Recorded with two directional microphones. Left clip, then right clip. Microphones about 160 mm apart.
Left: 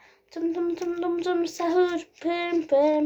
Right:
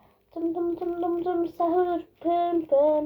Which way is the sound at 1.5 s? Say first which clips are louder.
Even; 55° left (ahead or behind).